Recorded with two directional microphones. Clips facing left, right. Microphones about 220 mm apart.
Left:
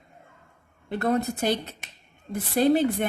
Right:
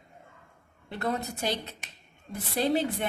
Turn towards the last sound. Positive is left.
turn(degrees=50)  # may be behind; listen again after turning